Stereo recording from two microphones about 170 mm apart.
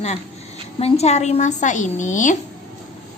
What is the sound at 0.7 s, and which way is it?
A woman's voice, 35° left (ahead or behind).